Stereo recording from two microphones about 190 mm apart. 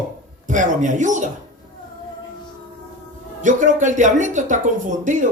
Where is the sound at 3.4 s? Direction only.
40° right (ahead or behind).